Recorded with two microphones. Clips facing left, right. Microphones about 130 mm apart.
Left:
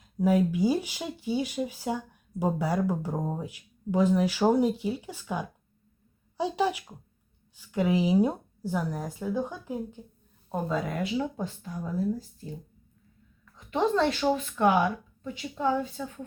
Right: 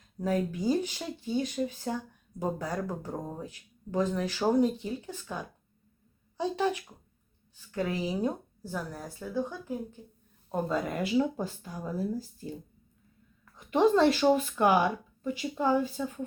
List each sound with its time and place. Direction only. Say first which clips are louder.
0.2 s speech: left 6 dB; 10° left (ahead or behind)
10.5 s speech: even; centre (ahead or behind)
13.7 s speech: right 3 dB; 5° right (ahead or behind)